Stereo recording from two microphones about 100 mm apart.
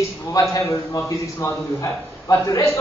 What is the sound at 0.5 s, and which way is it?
A man's voice, 35° left (ahead or behind).